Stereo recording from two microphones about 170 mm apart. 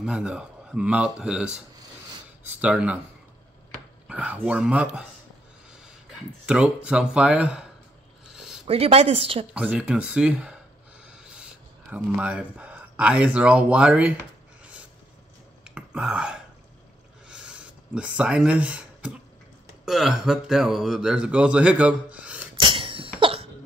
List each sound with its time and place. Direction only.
0.0 s speech: 5° right (ahead or behind)
2.6 s speech: 10° right (ahead or behind)
4.1 s speech: 10° right (ahead or behind)
6.4 s speech: 5° right (ahead or behind)
8.3 s a sound: centre (ahead or behind)
8.6 s a woman's voice: 35° right (ahead or behind)
9.5 s speech: 10° right (ahead or behind)
11.0 s a sound: 5° right (ahead or behind)
11.9 s speech: 10° right (ahead or behind)
15.6 s whispering: 5° right (ahead or behind)
17.3 s a sound: 5° right (ahead or behind)
19.8 s speech: centre (ahead or behind)
22.6 s cough: 30° right (ahead or behind)